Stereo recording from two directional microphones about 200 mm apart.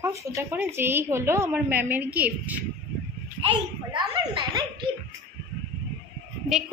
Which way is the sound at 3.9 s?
25° right (ahead or behind).